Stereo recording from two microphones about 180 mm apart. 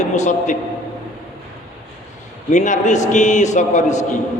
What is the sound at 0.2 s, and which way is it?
Speech, 45° left (ahead or behind).